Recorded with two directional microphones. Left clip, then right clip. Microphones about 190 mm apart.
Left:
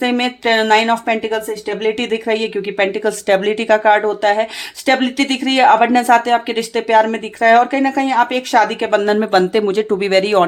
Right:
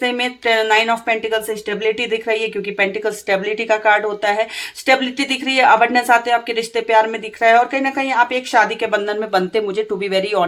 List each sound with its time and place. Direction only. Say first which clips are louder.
0.0 s speech: left 2 dB; 30° left (ahead or behind)